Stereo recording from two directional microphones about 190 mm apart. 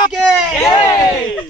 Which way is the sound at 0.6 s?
20° left (ahead or behind).